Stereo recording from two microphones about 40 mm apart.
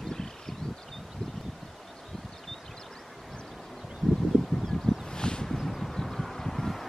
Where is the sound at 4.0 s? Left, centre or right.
Centre.